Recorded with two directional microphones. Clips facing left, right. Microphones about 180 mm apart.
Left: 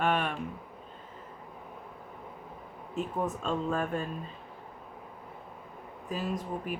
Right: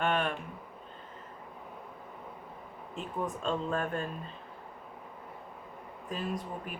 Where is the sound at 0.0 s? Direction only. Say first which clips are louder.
Left 1 dB; 5° left (ahead or behind).